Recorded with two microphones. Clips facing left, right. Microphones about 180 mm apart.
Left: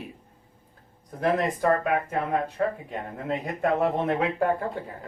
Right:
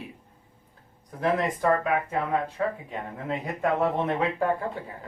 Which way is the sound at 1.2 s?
45° left (ahead or behind).